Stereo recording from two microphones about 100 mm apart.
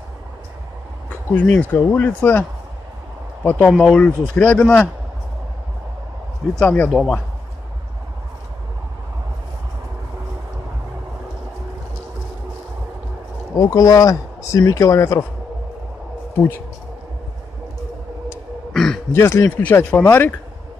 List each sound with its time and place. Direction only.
1.3 s speech: 15° left (ahead or behind)
3.6 s speech: centre (ahead or behind)
3.9 s speech: 10° left (ahead or behind)
6.6 s speech: 15° left (ahead or behind)
13.6 s speech: 35° left (ahead or behind)
16.3 s speech: 20° left (ahead or behind)
18.7 s throat clearing: 5° left (ahead or behind)
19.1 s speech: 25° left (ahead or behind)